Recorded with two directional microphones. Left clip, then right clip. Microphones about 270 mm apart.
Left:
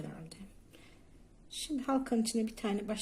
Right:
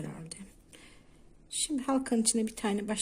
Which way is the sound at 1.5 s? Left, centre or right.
Right.